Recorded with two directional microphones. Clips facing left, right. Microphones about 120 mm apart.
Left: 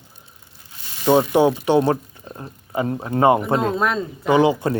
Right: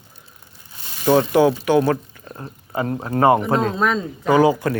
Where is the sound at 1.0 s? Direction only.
20° left (ahead or behind).